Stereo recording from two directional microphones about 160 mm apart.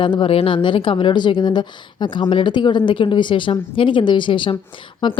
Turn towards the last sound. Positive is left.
turn(degrees=30)  # may be behind; listen again after turning